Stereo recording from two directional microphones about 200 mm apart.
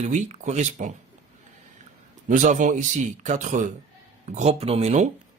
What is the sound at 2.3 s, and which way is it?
Speech, 40° right (ahead or behind).